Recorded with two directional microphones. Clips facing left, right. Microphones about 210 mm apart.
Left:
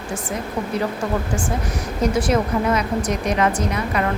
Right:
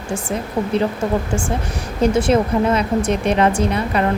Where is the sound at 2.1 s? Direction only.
25° right (ahead or behind).